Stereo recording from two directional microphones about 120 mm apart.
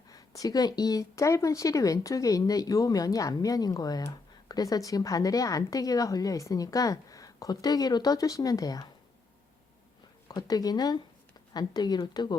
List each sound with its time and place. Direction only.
0.1 s a woman's voice: 30° left (ahead or behind)
10.2 s a woman's voice: 30° left (ahead or behind)